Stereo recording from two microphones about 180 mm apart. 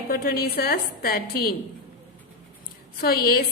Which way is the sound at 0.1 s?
55° left (ahead or behind).